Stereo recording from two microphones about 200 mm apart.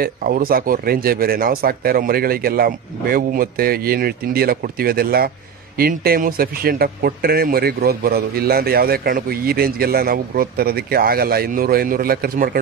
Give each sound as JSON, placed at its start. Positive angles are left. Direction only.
{"t": 0.0, "sound": "speech", "side_deg": -45}